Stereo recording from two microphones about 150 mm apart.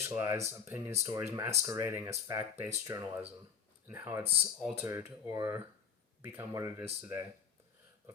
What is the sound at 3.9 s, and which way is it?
Speech, 15° right (ahead or behind).